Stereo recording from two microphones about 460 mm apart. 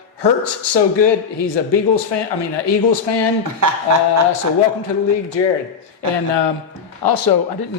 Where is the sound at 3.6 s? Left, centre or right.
Right.